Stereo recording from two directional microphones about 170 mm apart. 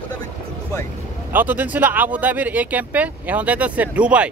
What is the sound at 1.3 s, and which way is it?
Speech, 10° right (ahead or behind).